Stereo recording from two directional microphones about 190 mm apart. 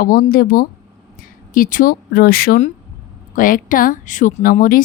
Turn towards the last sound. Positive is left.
turn(degrees=45)  # may be behind; listen again after turning